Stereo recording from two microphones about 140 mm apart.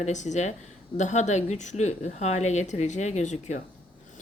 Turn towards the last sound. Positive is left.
turn(degrees=55)  # may be behind; listen again after turning